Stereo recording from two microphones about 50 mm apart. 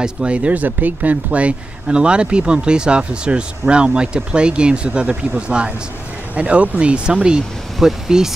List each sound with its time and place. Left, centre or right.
0.0 s speech: right